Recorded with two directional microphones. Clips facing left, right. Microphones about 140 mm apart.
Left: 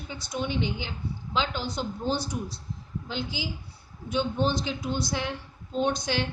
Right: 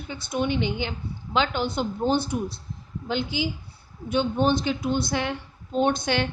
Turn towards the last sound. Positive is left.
turn(degrees=-60)  # may be behind; listen again after turning